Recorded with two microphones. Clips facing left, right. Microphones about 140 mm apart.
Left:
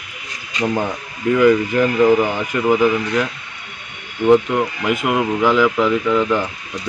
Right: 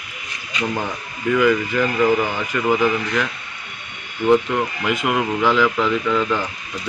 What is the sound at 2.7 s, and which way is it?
Speech, 15° left (ahead or behind).